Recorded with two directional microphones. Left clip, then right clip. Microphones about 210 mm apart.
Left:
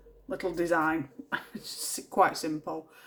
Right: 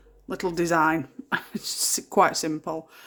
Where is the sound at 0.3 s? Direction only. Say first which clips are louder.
Right 4 dB; 55° right (ahead or behind).